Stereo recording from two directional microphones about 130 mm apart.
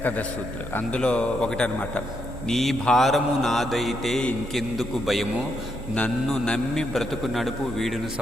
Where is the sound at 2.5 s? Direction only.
Centre (ahead or behind).